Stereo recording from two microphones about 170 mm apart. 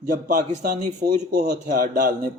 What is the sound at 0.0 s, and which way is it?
A man's voice, 50° right (ahead or behind).